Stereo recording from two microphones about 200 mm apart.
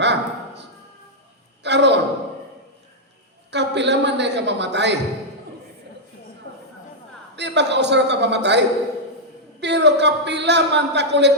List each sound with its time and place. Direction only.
0.0 s a sound: 60° right (ahead or behind)
3.5 s a woman's voice: 60° right (ahead or behind)
7.3 s a woman's voice: 60° right (ahead or behind)